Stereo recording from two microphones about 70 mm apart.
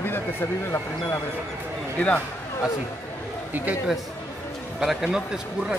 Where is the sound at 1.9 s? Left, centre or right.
Centre.